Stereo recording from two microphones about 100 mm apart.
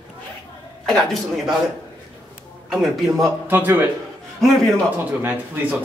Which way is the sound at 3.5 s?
20° right (ahead or behind).